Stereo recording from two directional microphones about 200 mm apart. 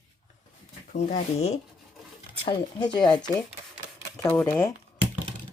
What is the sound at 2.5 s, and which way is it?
Speech, 20° left (ahead or behind).